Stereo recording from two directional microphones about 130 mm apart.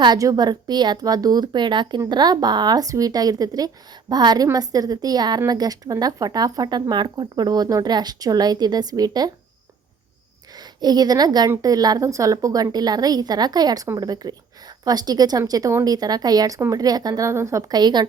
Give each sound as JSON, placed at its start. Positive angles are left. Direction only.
{"t": 0.0, "sound": "a woman's voice", "side_deg": -30}
{"t": 10.6, "sound": "a woman's voice", "side_deg": -30}